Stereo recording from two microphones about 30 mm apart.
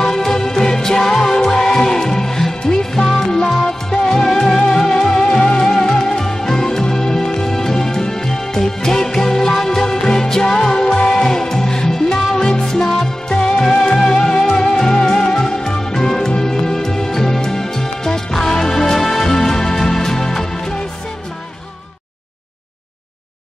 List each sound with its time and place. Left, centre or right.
0.0 s music: centre
9.8 s music: left